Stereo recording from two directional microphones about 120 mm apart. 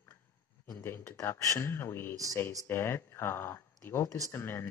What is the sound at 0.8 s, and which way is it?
Speech, 20° left (ahead or behind).